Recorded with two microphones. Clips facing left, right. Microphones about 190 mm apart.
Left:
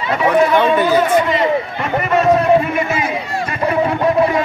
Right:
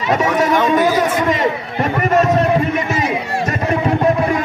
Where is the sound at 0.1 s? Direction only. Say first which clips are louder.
Left 2 dB; 45° right (ahead or behind).